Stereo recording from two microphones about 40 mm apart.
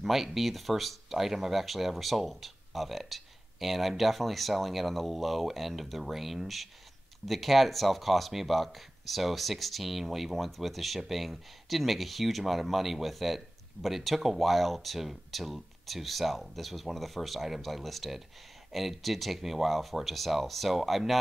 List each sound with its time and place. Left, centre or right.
0.0 s speech: centre